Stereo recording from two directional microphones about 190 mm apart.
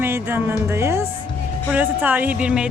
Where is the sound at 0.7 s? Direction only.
15° right (ahead or behind).